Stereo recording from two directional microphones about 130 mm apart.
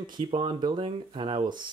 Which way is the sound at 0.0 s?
40° right (ahead or behind).